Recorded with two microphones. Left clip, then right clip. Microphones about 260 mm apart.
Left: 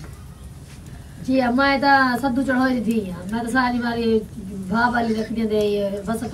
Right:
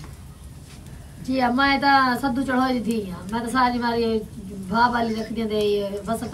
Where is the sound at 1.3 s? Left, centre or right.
Centre.